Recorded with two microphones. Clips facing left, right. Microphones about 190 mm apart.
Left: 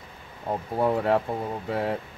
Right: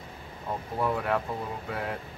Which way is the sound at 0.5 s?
30° left (ahead or behind).